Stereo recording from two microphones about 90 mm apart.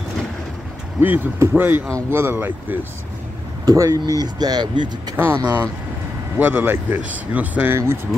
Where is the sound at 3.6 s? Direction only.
40° right (ahead or behind).